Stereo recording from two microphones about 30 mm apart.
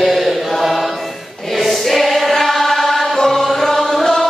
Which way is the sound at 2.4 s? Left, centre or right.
Centre.